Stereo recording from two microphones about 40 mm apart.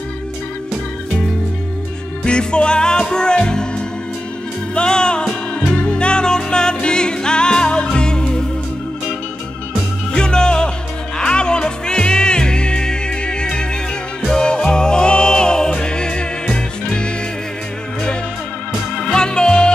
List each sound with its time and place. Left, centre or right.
2.2 s music: left
4.7 s music: left
10.1 s music: left
18.9 s music: left